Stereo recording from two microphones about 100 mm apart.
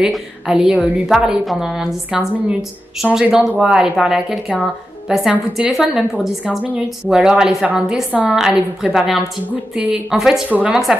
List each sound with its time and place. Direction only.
0.0 s a woman's voice: 5° right (ahead or behind)